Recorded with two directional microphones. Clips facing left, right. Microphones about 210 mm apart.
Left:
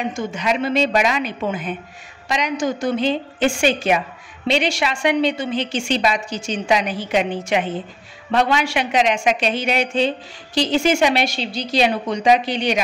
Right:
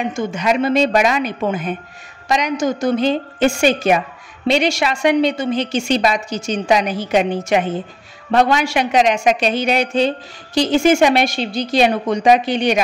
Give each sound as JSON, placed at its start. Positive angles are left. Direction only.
{"t": 0.1, "sound": "a woman's voice", "side_deg": -45}